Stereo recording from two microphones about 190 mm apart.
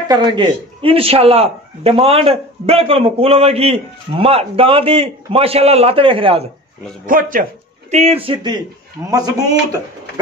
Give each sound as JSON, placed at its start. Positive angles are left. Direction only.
{"t": 0.1, "sound": "a man's voice", "side_deg": -25}
{"t": 7.1, "sound": "speech", "side_deg": -45}
{"t": 7.9, "sound": "speech", "side_deg": -30}